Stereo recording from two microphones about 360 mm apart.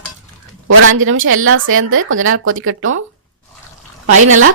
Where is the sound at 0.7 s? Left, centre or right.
Right.